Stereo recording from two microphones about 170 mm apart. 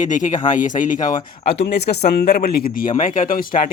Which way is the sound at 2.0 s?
70° left (ahead or behind).